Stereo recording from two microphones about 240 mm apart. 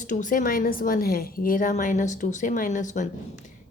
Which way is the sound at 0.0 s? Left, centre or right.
Left.